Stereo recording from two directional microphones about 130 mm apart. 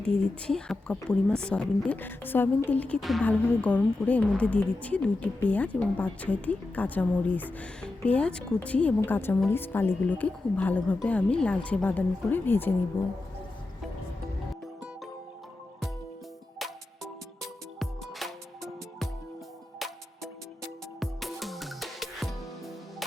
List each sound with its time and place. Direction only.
0.0 s a woman's voice: 5° left (ahead or behind)
3.0 s speech: centre (ahead or behind)
3.2 s a woman's voice: 10° left (ahead or behind)
18.2 s music: centre (ahead or behind)
19.8 s music: centre (ahead or behind)
21.0 s music: centre (ahead or behind)